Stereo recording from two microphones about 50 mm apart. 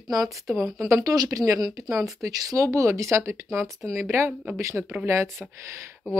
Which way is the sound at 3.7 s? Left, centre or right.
Right.